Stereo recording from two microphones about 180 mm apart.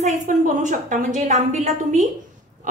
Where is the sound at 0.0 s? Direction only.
45° right (ahead or behind).